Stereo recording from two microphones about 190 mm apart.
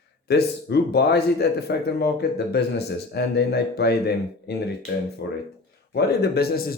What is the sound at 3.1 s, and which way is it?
Speech, 60° left (ahead or behind).